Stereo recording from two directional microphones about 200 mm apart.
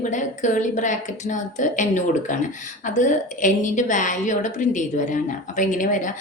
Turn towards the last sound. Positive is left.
turn(degrees=40)  # may be behind; listen again after turning